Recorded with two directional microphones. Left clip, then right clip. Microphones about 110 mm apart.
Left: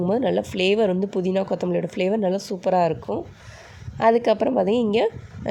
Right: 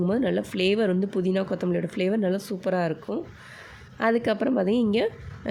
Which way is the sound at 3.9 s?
25° left (ahead or behind).